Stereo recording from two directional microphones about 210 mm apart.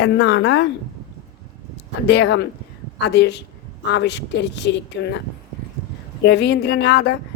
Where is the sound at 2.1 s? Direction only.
55° left (ahead or behind).